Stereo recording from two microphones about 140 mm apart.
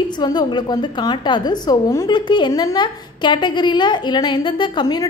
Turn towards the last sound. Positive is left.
turn(degrees=30)  # may be behind; listen again after turning